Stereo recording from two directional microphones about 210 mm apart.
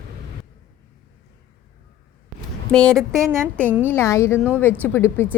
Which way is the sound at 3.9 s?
15° left (ahead or behind).